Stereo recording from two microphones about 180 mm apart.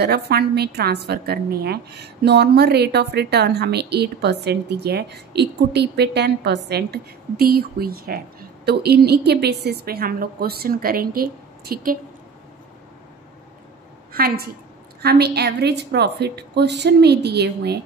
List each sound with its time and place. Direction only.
0.0 s a woman's voice: 65° right (ahead or behind)
14.1 s a woman's voice: 55° right (ahead or behind)